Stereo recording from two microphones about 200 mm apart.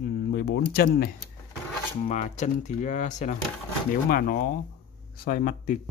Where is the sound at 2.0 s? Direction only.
35° left (ahead or behind).